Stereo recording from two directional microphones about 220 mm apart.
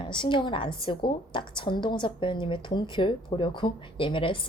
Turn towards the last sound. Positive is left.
turn(degrees=25)  # may be behind; listen again after turning